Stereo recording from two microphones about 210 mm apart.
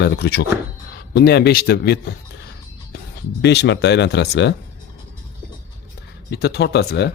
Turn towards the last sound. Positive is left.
turn(degrees=50)  # may be behind; listen again after turning